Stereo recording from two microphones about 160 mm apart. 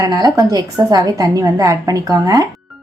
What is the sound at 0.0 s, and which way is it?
A woman's voice, 20° right (ahead or behind).